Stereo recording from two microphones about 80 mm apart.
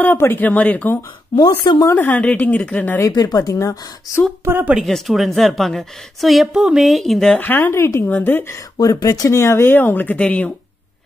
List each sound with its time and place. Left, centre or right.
0.2 s speech: left
1.3 s a woman's voice: left
2.0 s speech: left
3.1 s speech: left
3.5 s speech: left
4.5 s speech: right
4.8 s a woman's voice: centre
7.3 s speech: left
8.7 s speech: left; by 10.5 s centre